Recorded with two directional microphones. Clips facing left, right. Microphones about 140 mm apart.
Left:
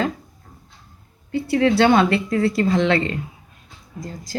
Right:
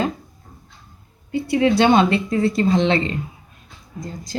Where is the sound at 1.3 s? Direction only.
15° right (ahead or behind).